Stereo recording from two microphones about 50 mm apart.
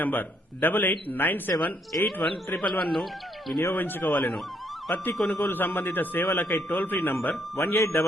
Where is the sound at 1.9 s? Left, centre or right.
Left.